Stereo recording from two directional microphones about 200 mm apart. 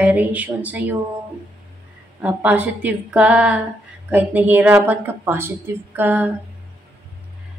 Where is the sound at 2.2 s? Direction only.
10° right (ahead or behind).